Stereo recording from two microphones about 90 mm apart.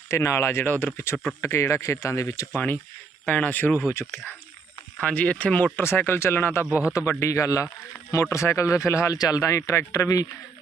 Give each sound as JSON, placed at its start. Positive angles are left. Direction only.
{"t": 0.1, "sound": "speech", "side_deg": 30}
{"t": 3.2, "sound": "speech", "side_deg": 15}
{"t": 4.9, "sound": "speech", "side_deg": 15}
{"t": 5.7, "sound": "speech", "side_deg": 25}
{"t": 6.7, "sound": "a man's voice", "side_deg": -15}
{"t": 6.9, "sound": "speech", "side_deg": 30}